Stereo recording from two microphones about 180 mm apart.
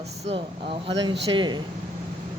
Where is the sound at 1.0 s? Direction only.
25° right (ahead or behind).